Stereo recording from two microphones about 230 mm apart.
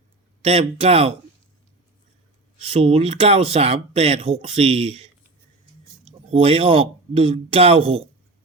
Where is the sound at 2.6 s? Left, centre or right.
Right.